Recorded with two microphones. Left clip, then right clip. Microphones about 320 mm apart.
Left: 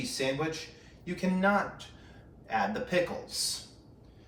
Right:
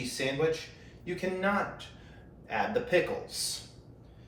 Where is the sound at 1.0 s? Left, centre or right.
Centre.